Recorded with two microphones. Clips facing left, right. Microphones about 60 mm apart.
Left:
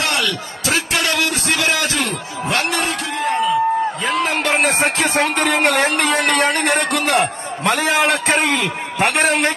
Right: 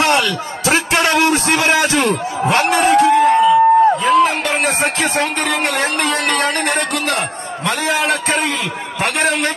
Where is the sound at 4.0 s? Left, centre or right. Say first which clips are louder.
Right 6 dB; centre.